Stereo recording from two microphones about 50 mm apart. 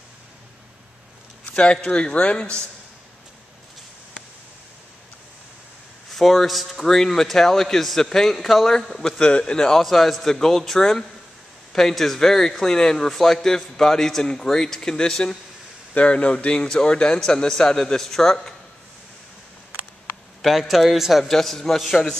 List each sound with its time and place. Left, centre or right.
1.5 s a man's voice: centre
6.1 s speech: centre
9.2 s speech: left
20.4 s speech: centre